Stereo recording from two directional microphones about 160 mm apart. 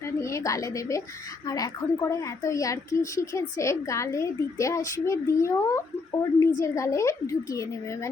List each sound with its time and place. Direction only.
0.2 s a child's voice: 20° left (ahead or behind)